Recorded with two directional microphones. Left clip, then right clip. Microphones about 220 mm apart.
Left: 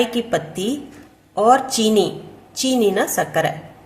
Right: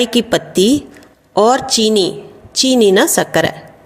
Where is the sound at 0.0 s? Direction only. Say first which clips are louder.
Right 5 dB; 40° right (ahead or behind).